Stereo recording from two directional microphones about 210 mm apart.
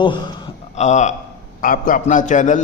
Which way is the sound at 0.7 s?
35° left (ahead or behind).